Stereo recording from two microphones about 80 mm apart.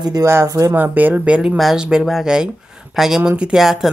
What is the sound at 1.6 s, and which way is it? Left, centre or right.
A woman's voice, centre.